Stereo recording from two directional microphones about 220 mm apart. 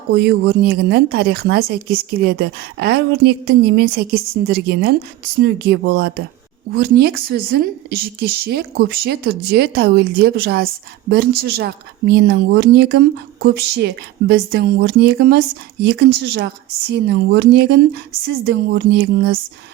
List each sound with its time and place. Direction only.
0.1 s speech: 50° right (ahead or behind)